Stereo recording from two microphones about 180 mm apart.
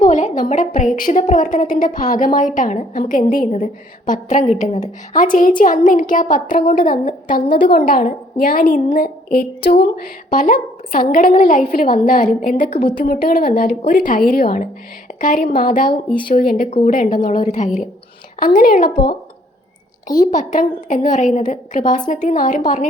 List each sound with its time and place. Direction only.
0.0 s a sound: 40° left (ahead or behind)
0.9 s a woman's voice: 45° left (ahead or behind)
16.6 s a woman's voice: 35° left (ahead or behind)
20.1 s a woman's voice: 45° left (ahead or behind)